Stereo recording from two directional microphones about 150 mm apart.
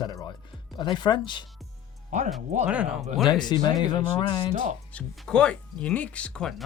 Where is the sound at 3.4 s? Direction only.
30° left (ahead or behind).